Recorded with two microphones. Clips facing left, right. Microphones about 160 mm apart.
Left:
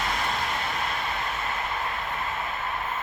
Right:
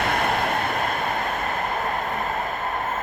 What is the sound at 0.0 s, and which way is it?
Vehicle, 60° right (ahead or behind).